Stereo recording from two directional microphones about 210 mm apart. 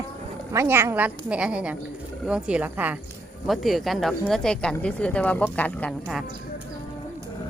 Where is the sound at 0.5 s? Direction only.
10° right (ahead or behind); by 6.2 s 5° left (ahead or behind).